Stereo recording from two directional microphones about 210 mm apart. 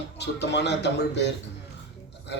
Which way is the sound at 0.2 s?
55° left (ahead or behind).